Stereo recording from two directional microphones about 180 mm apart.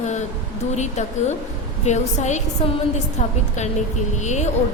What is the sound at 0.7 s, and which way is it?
Speech, 40° left (ahead or behind).